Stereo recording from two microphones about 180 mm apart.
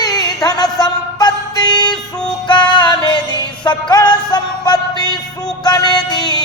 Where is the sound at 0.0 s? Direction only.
20° left (ahead or behind).